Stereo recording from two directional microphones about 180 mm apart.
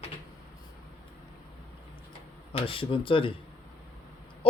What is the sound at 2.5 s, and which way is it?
Speech, 30° left (ahead or behind).